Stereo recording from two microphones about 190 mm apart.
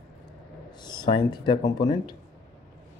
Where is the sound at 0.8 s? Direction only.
20° left (ahead or behind).